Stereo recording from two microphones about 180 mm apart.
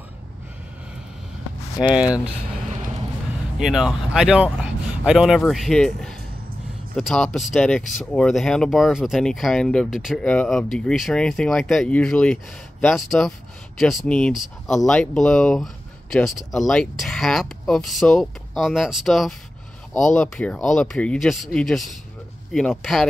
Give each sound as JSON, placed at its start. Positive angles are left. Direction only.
{"t": 1.8, "sound": "speech", "side_deg": -5}
{"t": 3.5, "sound": "speech", "side_deg": 0}